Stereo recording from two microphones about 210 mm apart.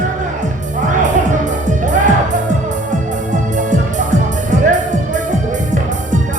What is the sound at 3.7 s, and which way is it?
Music, 35° right (ahead or behind).